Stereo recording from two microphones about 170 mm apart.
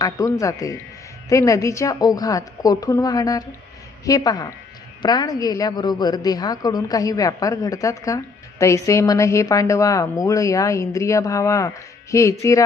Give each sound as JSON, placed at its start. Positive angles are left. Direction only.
{"t": 0.0, "sound": "a woman's voice", "side_deg": 20}